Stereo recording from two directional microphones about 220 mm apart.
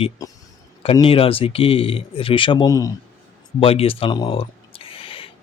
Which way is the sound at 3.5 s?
25° left (ahead or behind).